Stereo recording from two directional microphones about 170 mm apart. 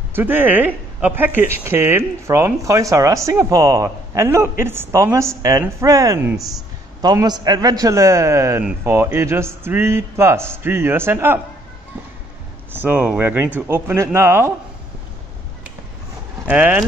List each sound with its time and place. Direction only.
0.1 s speech: 10° right (ahead or behind)
12.7 s speech: 10° right (ahead or behind)
16.4 s speech: 10° right (ahead or behind)